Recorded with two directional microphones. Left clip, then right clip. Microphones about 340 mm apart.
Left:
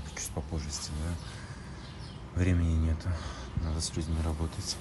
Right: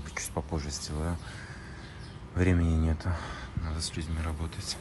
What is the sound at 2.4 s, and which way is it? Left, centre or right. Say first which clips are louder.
Speech: right 4 dB; centre.